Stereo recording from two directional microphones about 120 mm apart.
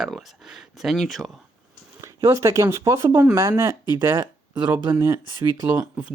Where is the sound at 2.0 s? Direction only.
25° right (ahead or behind).